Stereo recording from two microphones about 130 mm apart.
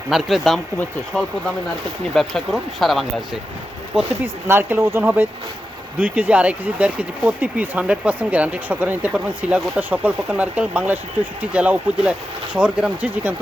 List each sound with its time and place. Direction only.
0.1 s speech: centre (ahead or behind)
2.1 s speech: centre (ahead or behind)
4.4 s speech: 20° right (ahead or behind)